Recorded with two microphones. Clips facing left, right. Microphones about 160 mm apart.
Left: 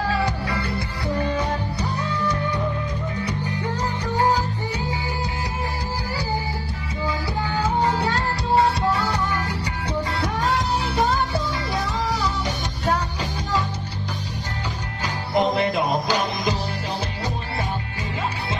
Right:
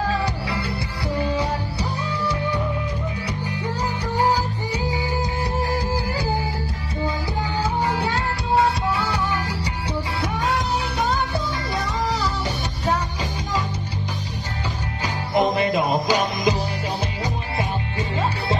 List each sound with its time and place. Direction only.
0.2 s music: 15° right (ahead or behind)
7.9 s music: centre (ahead or behind)
15.3 s music: 10° right (ahead or behind)